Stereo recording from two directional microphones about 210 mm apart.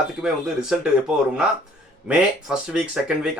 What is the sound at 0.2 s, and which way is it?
Speech, 5° right (ahead or behind).